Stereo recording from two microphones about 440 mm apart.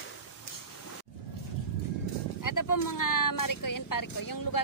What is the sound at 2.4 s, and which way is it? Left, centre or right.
Speech, left.